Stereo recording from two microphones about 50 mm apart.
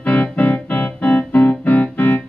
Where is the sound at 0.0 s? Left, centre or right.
Left.